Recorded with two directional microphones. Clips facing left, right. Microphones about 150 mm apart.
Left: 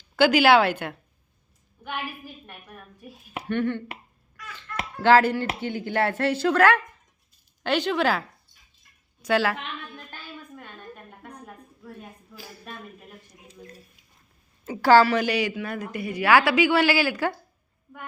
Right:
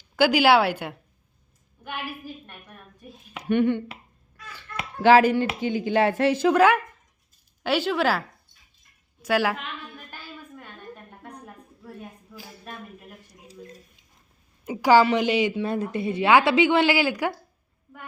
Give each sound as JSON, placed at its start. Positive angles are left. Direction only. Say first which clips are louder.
{"t": 0.2, "sound": "speech", "louder": "left 1 dB", "side_deg": -10}
{"t": 3.5, "sound": "speech", "louder": "right 5 dB", "side_deg": -15}
{"t": 5.0, "sound": "speech", "louder": "right 2 dB", "side_deg": -15}
{"t": 9.2, "sound": "speech", "louder": "even", "side_deg": -10}
{"t": 12.3, "sound": "speech", "louder": "even", "side_deg": -20}
{"t": 14.6, "sound": "a woman's voice", "louder": "left 1 dB", "side_deg": -15}